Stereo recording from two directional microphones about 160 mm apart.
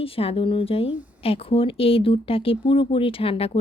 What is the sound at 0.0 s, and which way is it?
Speech, 35° left (ahead or behind).